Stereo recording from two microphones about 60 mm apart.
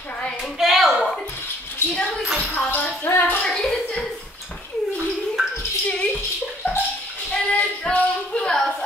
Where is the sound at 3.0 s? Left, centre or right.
Left.